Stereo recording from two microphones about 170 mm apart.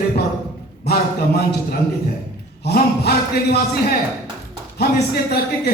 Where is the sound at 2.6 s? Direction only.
70° left (ahead or behind).